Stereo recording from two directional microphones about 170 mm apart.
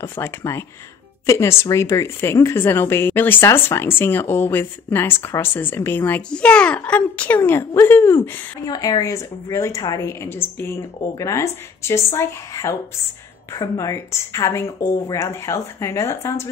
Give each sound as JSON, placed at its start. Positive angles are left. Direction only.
{"t": 0.0, "sound": "speech", "side_deg": 15}